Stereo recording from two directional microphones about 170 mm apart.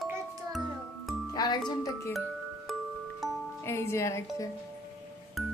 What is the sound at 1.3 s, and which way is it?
Speech, 25° left (ahead or behind).